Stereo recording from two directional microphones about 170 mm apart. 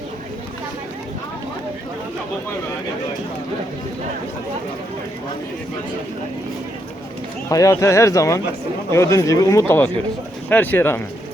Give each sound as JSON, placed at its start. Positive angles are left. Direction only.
{"t": 7.5, "sound": "speech", "side_deg": 15}